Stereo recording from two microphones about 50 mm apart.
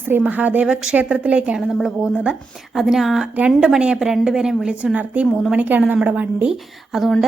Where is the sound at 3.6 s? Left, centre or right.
Centre.